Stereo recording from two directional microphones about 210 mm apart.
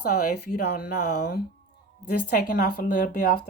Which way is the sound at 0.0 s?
45° left (ahead or behind).